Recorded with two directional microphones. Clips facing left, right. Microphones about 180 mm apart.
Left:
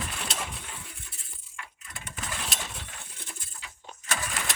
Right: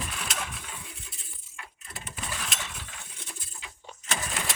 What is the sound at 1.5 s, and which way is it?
Keys jangling, 30° right (ahead or behind).